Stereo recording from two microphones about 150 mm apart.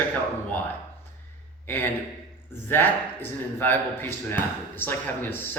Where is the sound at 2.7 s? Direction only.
15° left (ahead or behind).